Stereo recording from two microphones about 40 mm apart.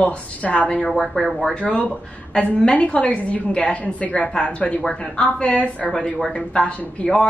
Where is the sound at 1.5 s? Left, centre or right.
Left.